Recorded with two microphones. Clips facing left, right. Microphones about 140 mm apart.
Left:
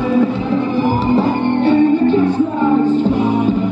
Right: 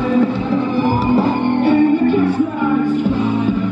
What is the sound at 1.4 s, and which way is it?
Music, 10° right (ahead or behind).